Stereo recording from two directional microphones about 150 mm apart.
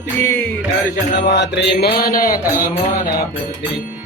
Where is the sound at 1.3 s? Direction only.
90° left; by 2.7 s 75° left (ahead or behind).